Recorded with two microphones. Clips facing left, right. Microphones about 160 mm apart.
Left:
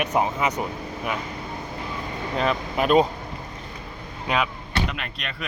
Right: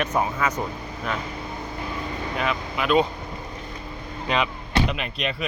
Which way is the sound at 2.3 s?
40° left (ahead or behind).